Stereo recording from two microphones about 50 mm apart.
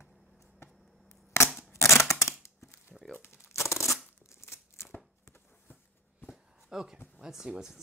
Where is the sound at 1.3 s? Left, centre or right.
Left.